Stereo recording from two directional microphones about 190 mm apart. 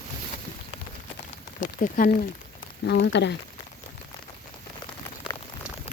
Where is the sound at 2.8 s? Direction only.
65° left (ahead or behind).